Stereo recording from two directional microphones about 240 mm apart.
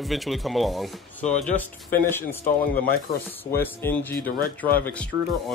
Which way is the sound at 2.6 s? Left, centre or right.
Left.